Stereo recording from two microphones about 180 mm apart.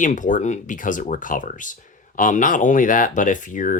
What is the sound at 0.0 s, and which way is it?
Speech, 45° left (ahead or behind).